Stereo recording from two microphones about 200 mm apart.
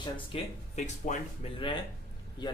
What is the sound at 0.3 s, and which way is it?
Speech, 30° left (ahead or behind).